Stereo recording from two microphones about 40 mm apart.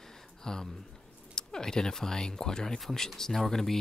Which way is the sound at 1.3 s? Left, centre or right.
Centre.